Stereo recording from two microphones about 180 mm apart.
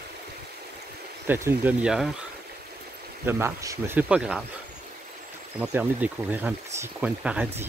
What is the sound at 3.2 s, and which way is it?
Speech, 15° right (ahead or behind).